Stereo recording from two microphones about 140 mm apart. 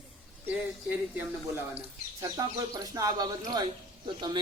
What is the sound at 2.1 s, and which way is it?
Speech, 25° right (ahead or behind).